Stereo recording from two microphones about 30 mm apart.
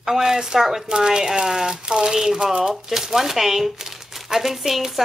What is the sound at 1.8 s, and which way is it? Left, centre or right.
Speech, right.